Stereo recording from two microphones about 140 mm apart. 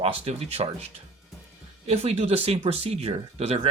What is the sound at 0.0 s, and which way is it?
Speech, 45° right (ahead or behind).